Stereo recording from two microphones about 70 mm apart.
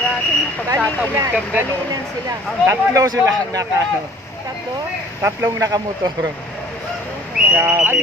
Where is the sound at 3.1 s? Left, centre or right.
Right.